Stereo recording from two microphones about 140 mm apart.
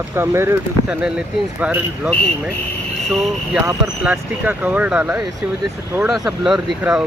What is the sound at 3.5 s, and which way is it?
Speech, 10° right (ahead or behind).